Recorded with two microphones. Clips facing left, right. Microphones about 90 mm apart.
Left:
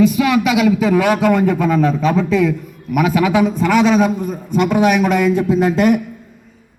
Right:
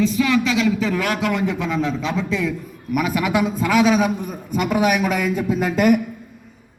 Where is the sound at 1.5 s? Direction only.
45° left (ahead or behind).